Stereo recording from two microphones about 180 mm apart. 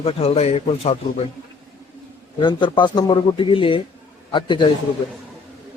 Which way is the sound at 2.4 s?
25° left (ahead or behind).